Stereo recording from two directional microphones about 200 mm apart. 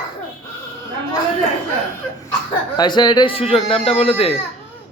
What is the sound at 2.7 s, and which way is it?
A man's voice, 20° left (ahead or behind).